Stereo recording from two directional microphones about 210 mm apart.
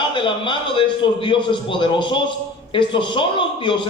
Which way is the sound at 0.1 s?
25° left (ahead or behind).